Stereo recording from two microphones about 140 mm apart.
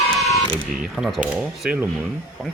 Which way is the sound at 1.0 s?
Centre (ahead or behind).